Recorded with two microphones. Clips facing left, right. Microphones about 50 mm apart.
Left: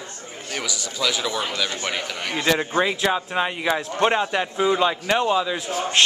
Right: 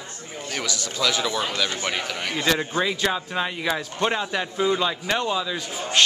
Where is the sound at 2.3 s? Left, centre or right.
Centre.